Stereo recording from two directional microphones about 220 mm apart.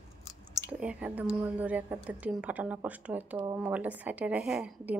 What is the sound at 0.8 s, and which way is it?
Speech, 5° right (ahead or behind).